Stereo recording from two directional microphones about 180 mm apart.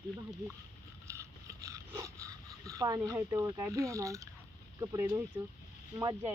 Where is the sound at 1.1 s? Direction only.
15° right (ahead or behind).